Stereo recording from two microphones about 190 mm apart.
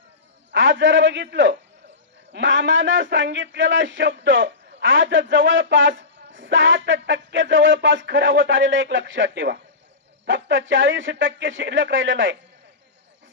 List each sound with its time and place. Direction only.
0.5 s a man's voice: 70° right (ahead or behind)